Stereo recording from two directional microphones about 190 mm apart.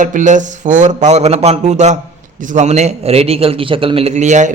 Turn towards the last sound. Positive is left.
turn(degrees=-40)  # may be behind; listen again after turning